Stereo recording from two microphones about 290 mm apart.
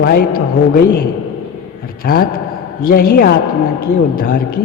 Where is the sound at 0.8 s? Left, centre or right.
Left.